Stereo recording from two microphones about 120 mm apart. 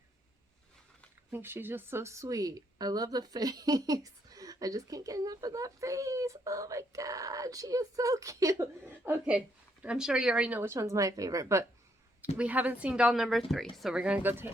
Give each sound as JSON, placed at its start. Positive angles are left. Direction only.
{"t": 1.3, "sound": "a woman's voice", "side_deg": -20}
{"t": 9.0, "sound": "a woman's voice", "side_deg": -15}
{"t": 10.6, "sound": "a woman's voice", "side_deg": -25}
{"t": 12.4, "sound": "a woman's voice", "side_deg": -10}